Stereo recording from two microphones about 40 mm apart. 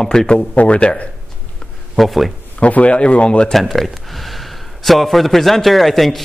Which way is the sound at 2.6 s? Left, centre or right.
Left.